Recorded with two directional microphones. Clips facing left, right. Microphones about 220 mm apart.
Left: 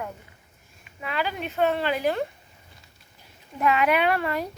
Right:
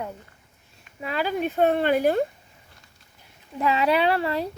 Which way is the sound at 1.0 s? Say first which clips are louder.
Right 4 dB; 40° right (ahead or behind).